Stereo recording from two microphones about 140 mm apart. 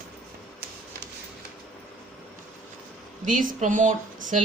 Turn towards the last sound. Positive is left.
turn(degrees=-65)  # may be behind; listen again after turning